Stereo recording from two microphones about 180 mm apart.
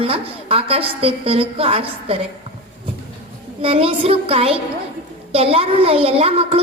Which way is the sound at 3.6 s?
30° right (ahead or behind).